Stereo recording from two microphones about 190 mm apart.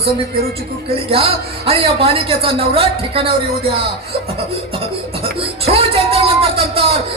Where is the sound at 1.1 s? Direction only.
30° right (ahead or behind).